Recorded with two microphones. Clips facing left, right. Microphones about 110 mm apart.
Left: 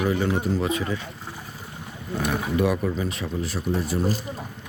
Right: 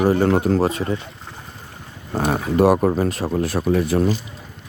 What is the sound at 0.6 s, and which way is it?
Speech, 35° right (ahead or behind).